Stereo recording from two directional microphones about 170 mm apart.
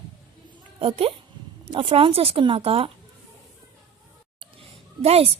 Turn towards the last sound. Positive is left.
turn(degrees=-35)  # may be behind; listen again after turning